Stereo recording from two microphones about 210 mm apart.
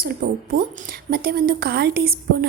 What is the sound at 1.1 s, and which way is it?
A woman's voice, 45° right (ahead or behind).